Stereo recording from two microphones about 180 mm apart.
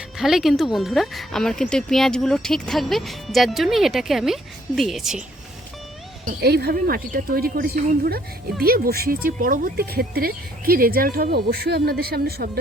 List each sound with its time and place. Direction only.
0.2 s speech: centre (ahead or behind)
6.2 s speech: 60° right (ahead or behind)